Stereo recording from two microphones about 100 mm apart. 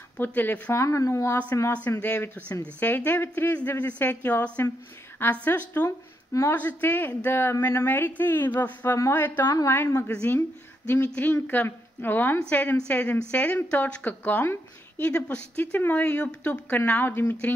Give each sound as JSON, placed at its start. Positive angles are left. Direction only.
{"t": 0.2, "sound": "speech", "side_deg": 20}
{"t": 1.9, "sound": "a woman's voice", "side_deg": 20}
{"t": 5.9, "sound": "speech", "side_deg": 30}
{"t": 6.8, "sound": "a woman's voice", "side_deg": 20}